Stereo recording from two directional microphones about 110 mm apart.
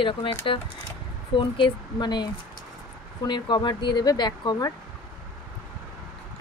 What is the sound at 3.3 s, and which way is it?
Speech, 45° left (ahead or behind).